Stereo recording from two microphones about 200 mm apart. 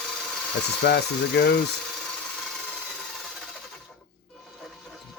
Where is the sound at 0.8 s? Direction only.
55° left (ahead or behind).